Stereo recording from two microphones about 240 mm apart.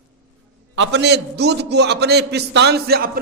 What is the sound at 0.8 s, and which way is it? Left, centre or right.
A man's voice, right.